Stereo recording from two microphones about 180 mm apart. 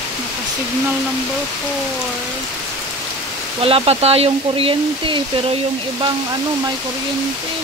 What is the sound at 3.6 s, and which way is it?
Speech, 35° right (ahead or behind).